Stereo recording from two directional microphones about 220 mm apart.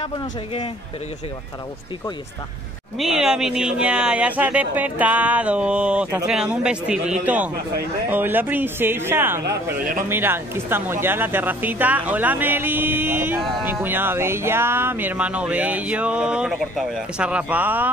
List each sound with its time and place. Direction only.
3.0 s speech: 5° right (ahead or behind)
9.4 s a man's voice: 45° right (ahead or behind)
10.0 s speech: 10° right (ahead or behind)